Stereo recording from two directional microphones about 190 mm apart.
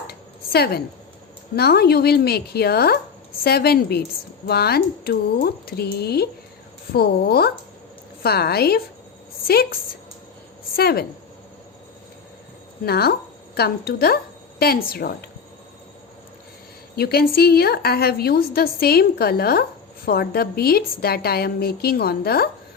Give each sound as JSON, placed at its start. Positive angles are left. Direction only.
{"t": 0.1, "sound": "a sound", "side_deg": 55}
{"t": 1.5, "sound": "a woman's voice", "side_deg": 55}
{"t": 10.8, "sound": "a woman's voice", "side_deg": 55}
{"t": 12.8, "sound": "a woman's voice", "side_deg": 55}
{"t": 16.9, "sound": "a woman's voice", "side_deg": 55}